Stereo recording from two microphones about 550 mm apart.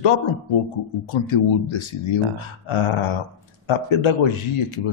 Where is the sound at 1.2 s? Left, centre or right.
Left.